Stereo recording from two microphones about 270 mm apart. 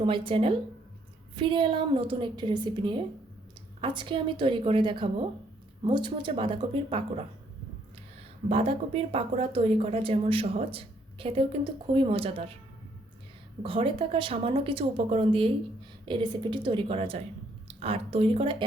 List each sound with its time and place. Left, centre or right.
0.0 s a woman's voice: centre
8.4 s speech: right
13.6 s a woman's voice: centre